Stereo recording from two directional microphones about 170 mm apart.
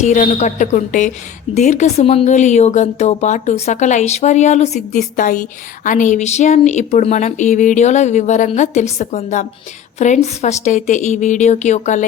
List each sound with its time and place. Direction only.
0.0 s a woman's voice: 45° left (ahead or behind)